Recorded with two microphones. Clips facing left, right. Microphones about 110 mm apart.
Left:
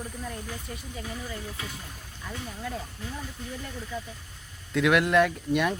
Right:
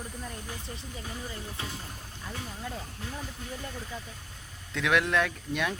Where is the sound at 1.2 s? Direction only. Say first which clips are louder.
Left 1 dB; 30° right (ahead or behind).